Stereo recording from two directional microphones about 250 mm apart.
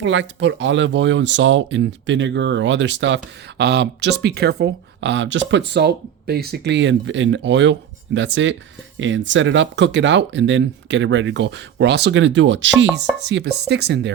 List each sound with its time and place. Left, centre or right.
0.0 s speech: right